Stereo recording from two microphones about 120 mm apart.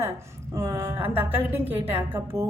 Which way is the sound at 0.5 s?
25° right (ahead or behind).